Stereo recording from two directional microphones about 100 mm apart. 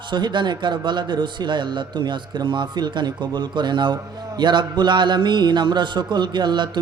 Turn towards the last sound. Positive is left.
turn(degrees=-50)  # may be behind; listen again after turning